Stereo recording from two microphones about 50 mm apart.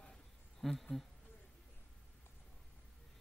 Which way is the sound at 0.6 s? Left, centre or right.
Centre.